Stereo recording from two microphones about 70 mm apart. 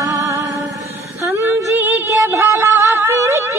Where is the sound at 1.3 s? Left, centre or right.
Right.